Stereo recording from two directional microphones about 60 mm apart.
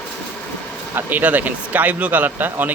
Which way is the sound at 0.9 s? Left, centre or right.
Right.